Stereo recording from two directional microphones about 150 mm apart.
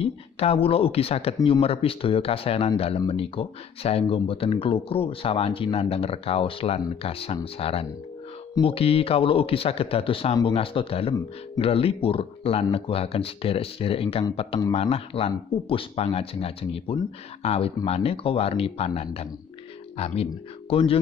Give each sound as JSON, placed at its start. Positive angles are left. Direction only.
{"t": 0.0, "sound": "speech", "side_deg": 40}
{"t": 20.7, "sound": "speech", "side_deg": 40}